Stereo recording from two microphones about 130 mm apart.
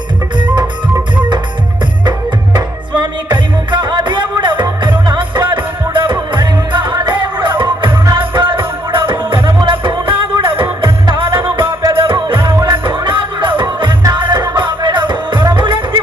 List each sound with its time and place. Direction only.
0.3 s music: 35° right (ahead or behind)
3.0 s music: 35° right (ahead or behind)